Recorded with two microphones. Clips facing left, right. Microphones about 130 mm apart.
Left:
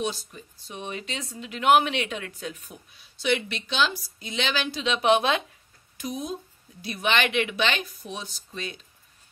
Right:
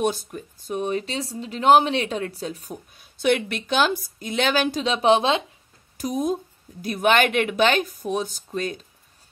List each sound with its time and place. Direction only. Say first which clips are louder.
0.0 s speech: right 6 dB; 55° right (ahead or behind); by 5.4 s 30° right (ahead or behind)
5.9 s speech: right 8 dB; 45° right (ahead or behind)